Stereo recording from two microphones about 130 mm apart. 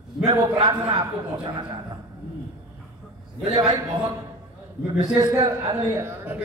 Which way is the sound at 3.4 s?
35° right (ahead or behind).